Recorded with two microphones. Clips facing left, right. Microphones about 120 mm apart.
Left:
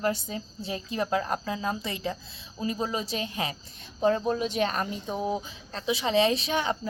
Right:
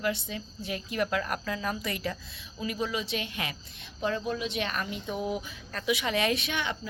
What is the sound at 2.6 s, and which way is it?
Speech, 35° left (ahead or behind).